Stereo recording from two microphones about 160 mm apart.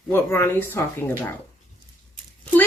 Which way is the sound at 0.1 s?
15° left (ahead or behind).